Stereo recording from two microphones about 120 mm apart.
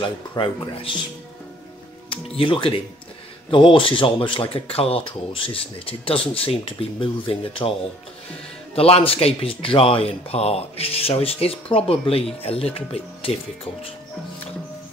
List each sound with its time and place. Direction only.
0.4 s speech: 45° left (ahead or behind)
2.0 s speech: 50° left (ahead or behind)
8.7 s speech: 55° left (ahead or behind)